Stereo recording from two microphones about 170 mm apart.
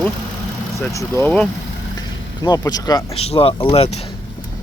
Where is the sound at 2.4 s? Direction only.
20° left (ahead or behind).